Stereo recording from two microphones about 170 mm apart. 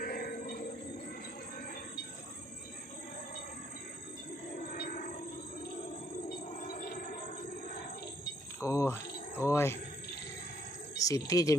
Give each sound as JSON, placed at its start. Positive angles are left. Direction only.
{"t": 0.0, "sound": "a sound", "side_deg": 60}
{"t": 4.5, "sound": "train", "side_deg": 55}
{"t": 6.5, "sound": "music", "side_deg": 50}
{"t": 8.6, "sound": "a sound", "side_deg": 15}
{"t": 9.4, "sound": "speech", "side_deg": 15}
{"t": 10.9, "sound": "speech", "side_deg": 20}